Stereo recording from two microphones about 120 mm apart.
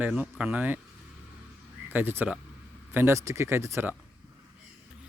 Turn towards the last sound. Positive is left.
turn(degrees=-20)  # may be behind; listen again after turning